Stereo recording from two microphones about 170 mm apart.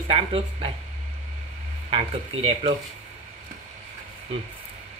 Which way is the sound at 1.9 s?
35° right (ahead or behind).